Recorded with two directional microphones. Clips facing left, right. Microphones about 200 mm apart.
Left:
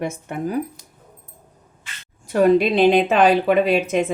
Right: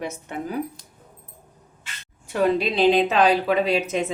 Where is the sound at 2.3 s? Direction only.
50° left (ahead or behind).